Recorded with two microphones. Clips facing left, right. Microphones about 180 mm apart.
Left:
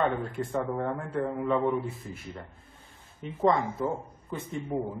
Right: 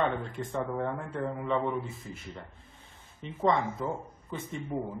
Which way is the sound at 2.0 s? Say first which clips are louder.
Left 2 dB; 10° right (ahead or behind).